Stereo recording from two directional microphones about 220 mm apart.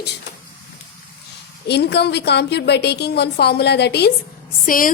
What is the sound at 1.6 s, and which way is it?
A woman's voice, 50° left (ahead or behind).